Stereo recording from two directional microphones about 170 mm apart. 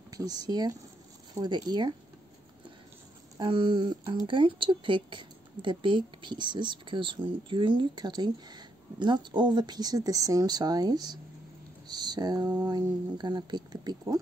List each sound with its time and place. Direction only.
0.1 s speech: 20° right (ahead or behind)
3.3 s speech: 30° right (ahead or behind)